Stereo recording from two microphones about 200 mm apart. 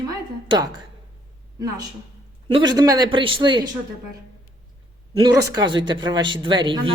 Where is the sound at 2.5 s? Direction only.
20° right (ahead or behind).